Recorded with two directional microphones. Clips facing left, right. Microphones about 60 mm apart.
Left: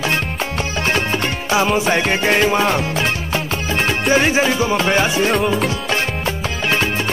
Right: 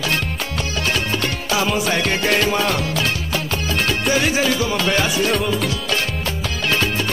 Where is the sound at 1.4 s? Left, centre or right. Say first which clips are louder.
Left 4 dB; left.